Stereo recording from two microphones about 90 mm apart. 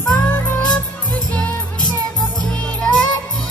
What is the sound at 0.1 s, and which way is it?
Music, 20° left (ahead or behind).